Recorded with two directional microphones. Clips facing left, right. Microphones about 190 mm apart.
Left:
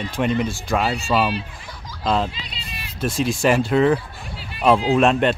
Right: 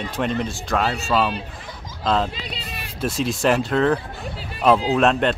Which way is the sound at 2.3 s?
50° right (ahead or behind).